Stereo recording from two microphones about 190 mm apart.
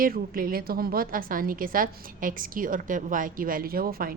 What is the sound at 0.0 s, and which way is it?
A woman's voice, 50° right (ahead or behind).